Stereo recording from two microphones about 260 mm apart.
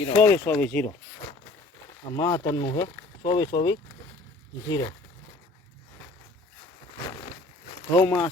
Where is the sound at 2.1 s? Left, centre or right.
Centre.